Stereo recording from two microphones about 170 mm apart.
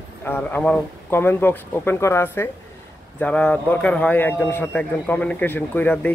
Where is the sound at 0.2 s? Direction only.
10° left (ahead or behind).